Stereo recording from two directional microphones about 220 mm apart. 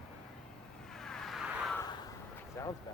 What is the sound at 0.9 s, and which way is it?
Vehicle, centre (ahead or behind).